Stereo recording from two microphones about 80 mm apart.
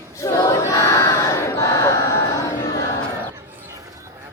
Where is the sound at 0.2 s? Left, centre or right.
Left.